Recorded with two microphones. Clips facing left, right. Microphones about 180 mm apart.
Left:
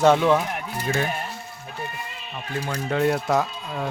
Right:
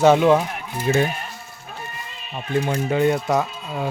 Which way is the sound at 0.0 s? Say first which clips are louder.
Right 3 dB; 10° right (ahead or behind).